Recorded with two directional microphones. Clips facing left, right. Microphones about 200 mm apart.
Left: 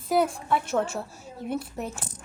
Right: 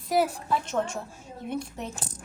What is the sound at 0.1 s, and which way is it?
Speech, centre (ahead or behind).